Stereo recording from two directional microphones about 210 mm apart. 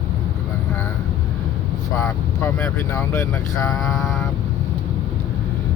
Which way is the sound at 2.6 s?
10° left (ahead or behind).